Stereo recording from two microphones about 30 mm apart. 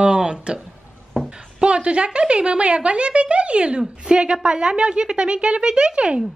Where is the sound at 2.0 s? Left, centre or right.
Right.